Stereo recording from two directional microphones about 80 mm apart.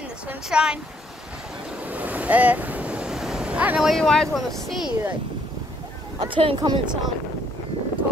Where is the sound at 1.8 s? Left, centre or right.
Centre.